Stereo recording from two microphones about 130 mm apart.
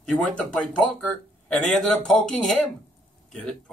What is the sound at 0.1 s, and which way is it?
Speech, 10° left (ahead or behind).